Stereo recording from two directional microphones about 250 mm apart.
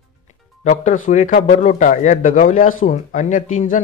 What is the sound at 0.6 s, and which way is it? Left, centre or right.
A man's voice, left.